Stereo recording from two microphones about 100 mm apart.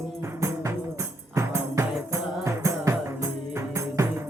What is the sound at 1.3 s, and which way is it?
Music, 30° right (ahead or behind).